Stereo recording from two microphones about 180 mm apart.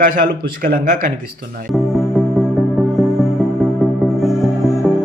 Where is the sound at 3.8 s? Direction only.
Centre (ahead or behind).